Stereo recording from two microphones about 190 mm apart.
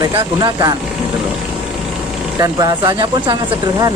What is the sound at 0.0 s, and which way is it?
Speech, 20° right (ahead or behind).